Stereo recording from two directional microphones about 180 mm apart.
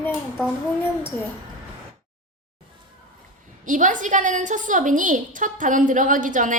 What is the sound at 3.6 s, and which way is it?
A woman's voice, 45° right (ahead or behind).